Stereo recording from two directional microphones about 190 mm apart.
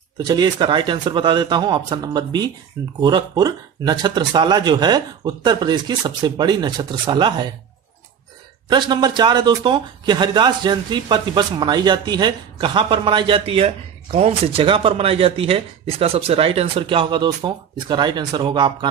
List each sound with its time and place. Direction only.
0.2 s speech: 20° right (ahead or behind)
8.6 s speech: 25° right (ahead or behind)